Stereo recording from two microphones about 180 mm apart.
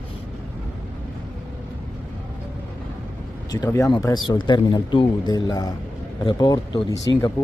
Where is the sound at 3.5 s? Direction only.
20° left (ahead or behind).